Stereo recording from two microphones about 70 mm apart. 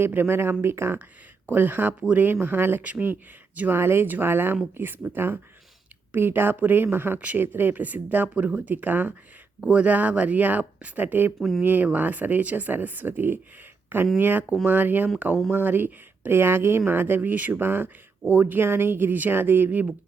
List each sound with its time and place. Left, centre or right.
0.0 s speech: right
1.5 s speech: right
11.3 s speech: centre
11.6 s speech: right